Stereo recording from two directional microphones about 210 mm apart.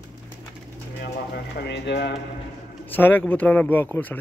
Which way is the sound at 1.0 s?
55° left (ahead or behind).